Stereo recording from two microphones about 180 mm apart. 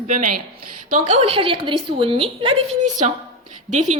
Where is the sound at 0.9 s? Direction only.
40° right (ahead or behind).